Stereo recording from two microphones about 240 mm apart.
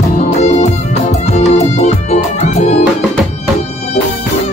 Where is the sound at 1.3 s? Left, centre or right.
Left.